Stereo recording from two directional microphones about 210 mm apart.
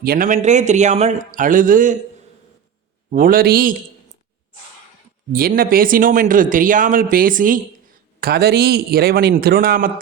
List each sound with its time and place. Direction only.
0.0 s speech: 45° right (ahead or behind)
3.1 s a man's voice: 40° right (ahead or behind)
5.3 s a man's voice: 45° right (ahead or behind)